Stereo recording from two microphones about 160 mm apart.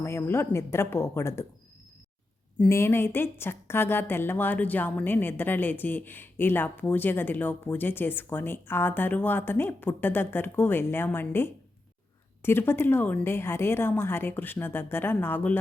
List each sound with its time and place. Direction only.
0.0 s a woman's voice: 15° left (ahead or behind)
2.6 s a woman's voice: 15° left (ahead or behind)